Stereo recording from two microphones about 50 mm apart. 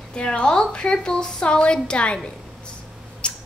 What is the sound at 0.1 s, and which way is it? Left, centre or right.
A woman's voice, centre.